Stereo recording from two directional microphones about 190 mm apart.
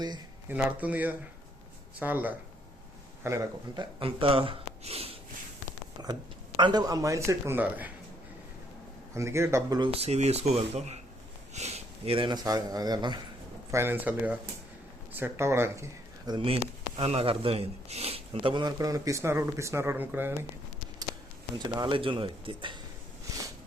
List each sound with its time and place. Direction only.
0.4 s speech: 10° right (ahead or behind)
4.0 s speech: 30° right (ahead or behind)
6.6 s speech: 20° right (ahead or behind)
9.1 s speech: 15° right (ahead or behind)
21.6 s speech: 25° right (ahead or behind)